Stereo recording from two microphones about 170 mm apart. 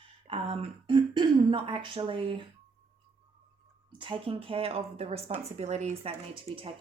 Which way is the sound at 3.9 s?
30° right (ahead or behind).